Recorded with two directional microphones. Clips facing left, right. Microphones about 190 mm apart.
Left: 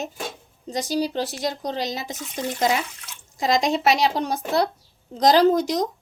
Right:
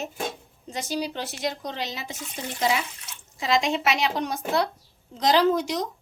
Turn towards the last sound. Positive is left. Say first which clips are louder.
# left 4 dB
turn(degrees=40)  # may be behind; listen again after turning